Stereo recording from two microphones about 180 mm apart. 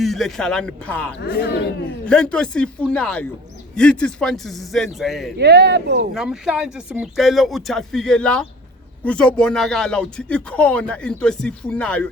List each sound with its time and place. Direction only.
0.0 s speech: centre (ahead or behind)
1.2 s a man's voice: 65° left (ahead or behind)
2.0 s speech: 5° left (ahead or behind)
5.4 s speech: 65° right (ahead or behind)
6.1 s speech: 5° right (ahead or behind)